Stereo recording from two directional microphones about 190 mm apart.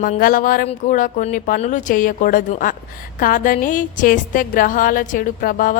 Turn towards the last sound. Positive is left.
turn(degrees=45)  # may be behind; listen again after turning